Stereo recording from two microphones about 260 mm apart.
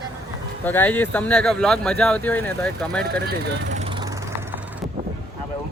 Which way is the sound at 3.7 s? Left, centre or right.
Right.